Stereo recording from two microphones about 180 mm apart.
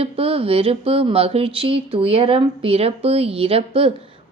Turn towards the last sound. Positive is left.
turn(degrees=-30)  # may be behind; listen again after turning